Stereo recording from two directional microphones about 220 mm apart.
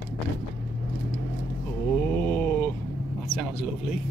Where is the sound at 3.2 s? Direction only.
5° left (ahead or behind).